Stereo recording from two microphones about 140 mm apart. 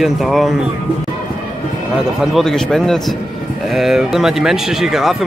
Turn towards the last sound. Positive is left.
turn(degrees=-5)  # may be behind; listen again after turning